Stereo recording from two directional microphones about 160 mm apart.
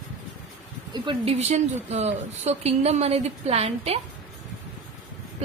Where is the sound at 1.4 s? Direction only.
45° right (ahead or behind).